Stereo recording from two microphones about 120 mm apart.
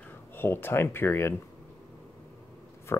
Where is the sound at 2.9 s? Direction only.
20° left (ahead or behind).